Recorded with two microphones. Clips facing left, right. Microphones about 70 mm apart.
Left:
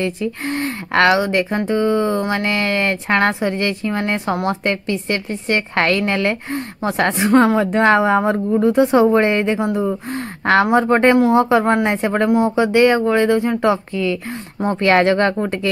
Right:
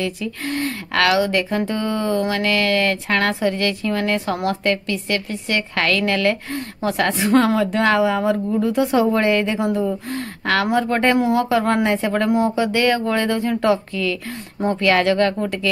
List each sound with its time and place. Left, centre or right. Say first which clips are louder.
0.0 s a woman's voice: left 3 dB; left